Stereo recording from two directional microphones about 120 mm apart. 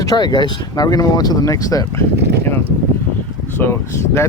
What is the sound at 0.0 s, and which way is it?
Speech, 30° left (ahead or behind).